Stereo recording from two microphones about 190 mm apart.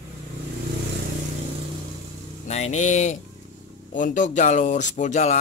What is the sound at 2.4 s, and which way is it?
Speech, 35° left (ahead or behind).